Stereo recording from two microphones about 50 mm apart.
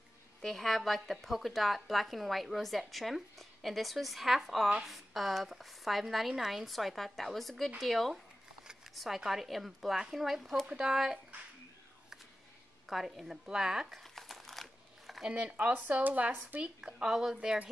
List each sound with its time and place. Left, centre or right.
0.4 s a woman's voice: centre
10.7 s speech: centre
12.8 s a woman's voice: centre
14.0 s crumpling: centre
15.2 s speech: right
16.6 s speech: centre